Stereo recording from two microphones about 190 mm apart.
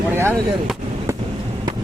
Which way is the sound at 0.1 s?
10° right (ahead or behind).